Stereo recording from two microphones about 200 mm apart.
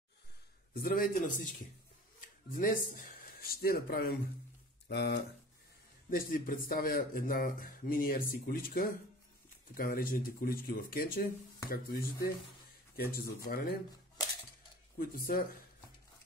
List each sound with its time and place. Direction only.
0.7 s speech: 45° left (ahead or behind)
4.8 s speech: 60° left (ahead or behind)
6.0 s speech: 45° left (ahead or behind)
15.0 s speech: 45° left (ahead or behind)